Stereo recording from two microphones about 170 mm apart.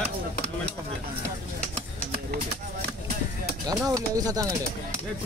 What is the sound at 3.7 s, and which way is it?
Speech, 20° right (ahead or behind).